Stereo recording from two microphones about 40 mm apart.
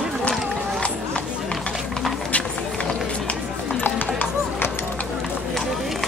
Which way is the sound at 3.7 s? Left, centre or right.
Left.